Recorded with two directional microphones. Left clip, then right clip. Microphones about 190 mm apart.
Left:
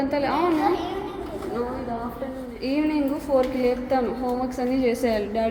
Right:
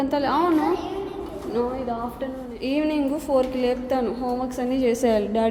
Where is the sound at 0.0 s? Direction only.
20° right (ahead or behind).